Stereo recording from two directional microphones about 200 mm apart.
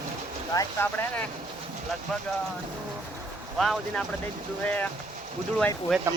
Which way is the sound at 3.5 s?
Centre (ahead or behind).